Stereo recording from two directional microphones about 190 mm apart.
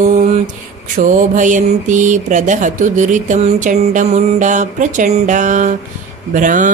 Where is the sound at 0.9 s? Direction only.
40° right (ahead or behind).